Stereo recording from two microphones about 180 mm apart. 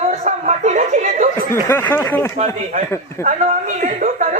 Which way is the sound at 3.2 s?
45° right (ahead or behind).